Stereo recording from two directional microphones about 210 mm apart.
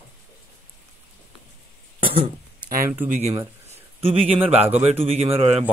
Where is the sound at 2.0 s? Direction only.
25° right (ahead or behind).